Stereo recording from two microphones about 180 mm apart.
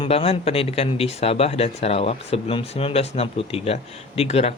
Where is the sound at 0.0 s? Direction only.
35° left (ahead or behind).